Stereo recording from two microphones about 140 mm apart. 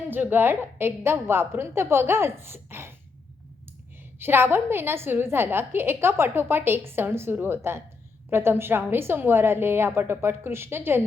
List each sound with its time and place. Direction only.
0.1 s a woman's voice: 15° right (ahead or behind)
4.2 s a woman's voice: 15° right (ahead or behind)